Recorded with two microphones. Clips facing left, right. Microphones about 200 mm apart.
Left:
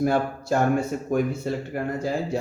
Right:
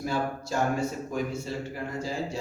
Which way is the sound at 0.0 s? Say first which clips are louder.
Left 7 dB; 55° left (ahead or behind).